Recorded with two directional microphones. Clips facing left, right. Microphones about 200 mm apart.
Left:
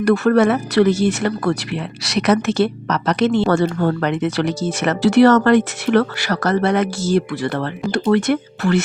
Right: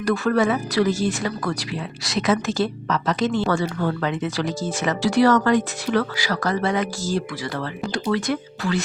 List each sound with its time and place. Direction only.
0.0 s speech: 65° left (ahead or behind)